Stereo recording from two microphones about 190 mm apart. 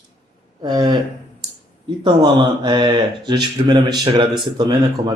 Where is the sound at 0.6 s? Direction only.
25° right (ahead or behind).